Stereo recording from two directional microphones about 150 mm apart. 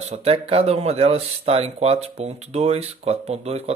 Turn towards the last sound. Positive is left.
turn(degrees=-45)  # may be behind; listen again after turning